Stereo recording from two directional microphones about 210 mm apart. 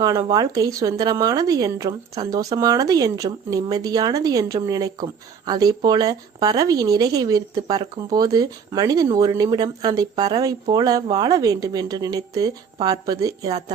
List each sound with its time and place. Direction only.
0.0 s a woman's voice: 15° right (ahead or behind)